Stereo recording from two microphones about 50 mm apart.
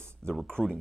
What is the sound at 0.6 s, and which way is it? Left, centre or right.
Speech, centre.